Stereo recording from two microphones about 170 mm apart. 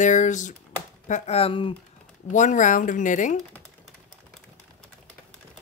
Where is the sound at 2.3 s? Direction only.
45° left (ahead or behind).